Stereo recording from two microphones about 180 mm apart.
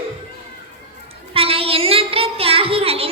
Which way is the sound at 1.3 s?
30° right (ahead or behind).